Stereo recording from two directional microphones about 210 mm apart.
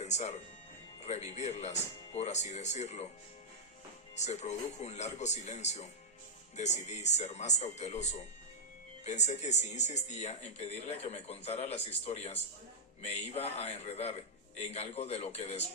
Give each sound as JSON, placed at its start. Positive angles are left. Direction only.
{"t": 0.0, "sound": "speech", "side_deg": 35}
{"t": 4.1, "sound": "speech", "side_deg": 35}